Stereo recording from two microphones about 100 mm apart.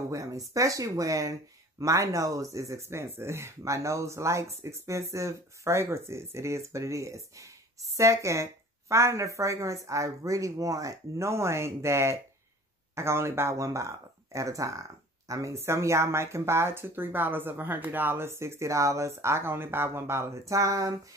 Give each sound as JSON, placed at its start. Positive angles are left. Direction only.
{"t": 0.1, "sound": "speech", "side_deg": -35}